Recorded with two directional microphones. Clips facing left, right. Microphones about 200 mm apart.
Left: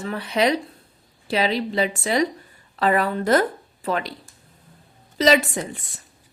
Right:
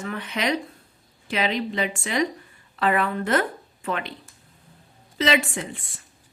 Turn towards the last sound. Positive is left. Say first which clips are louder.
# left 4 dB
turn(degrees=40)  # may be behind; listen again after turning